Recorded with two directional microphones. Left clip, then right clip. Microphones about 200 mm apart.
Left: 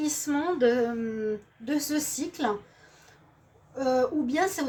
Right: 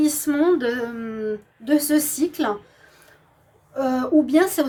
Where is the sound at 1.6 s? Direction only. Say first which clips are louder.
Right 11 dB; 50° right (ahead or behind).